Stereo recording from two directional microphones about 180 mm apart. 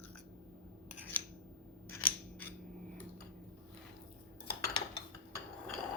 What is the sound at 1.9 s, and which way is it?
Scissors, 10° left (ahead or behind).